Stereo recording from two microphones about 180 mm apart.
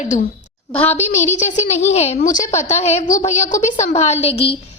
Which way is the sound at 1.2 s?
40° left (ahead or behind).